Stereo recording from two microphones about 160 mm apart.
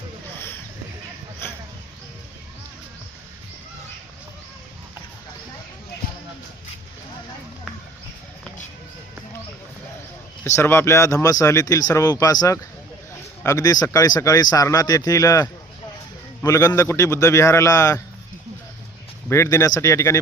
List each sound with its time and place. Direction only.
10.4 s speech: 15° left (ahead or behind)
19.3 s speech: 20° left (ahead or behind)